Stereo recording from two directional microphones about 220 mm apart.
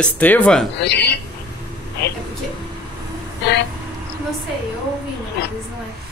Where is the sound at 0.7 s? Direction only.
50° left (ahead or behind).